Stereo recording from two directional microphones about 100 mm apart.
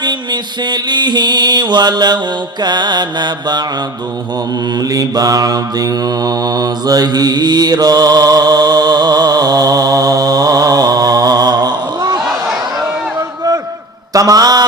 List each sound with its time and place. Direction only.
0.0 s mantra: 50° right (ahead or behind)
4.8 s mantra: 40° right (ahead or behind)
13.1 s a sound: 35° right (ahead or behind)